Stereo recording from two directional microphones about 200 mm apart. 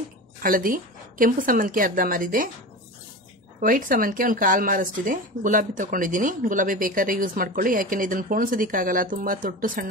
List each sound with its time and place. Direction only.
0.4 s speech: 45° right (ahead or behind)
3.6 s speech: 45° right (ahead or behind)